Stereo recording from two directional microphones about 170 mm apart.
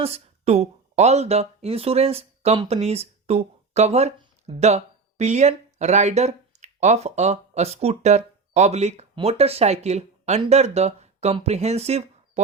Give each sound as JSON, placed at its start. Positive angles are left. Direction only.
{"t": 0.0, "sound": "speech", "side_deg": -35}